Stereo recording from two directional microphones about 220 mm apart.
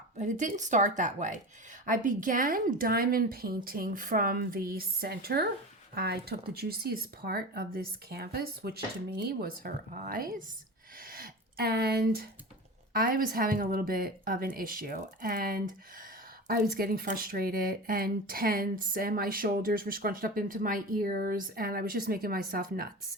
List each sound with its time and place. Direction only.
0.2 s speech: 35° right (ahead or behind)